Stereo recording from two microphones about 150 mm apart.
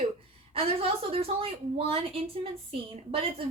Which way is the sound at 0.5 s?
40° right (ahead or behind).